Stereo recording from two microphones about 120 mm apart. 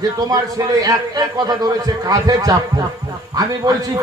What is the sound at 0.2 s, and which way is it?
Speech, 30° right (ahead or behind).